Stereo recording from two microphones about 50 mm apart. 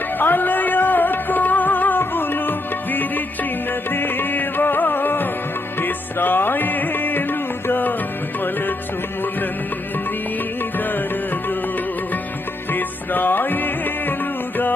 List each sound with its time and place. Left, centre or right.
0.2 s music: left
12.7 s music: left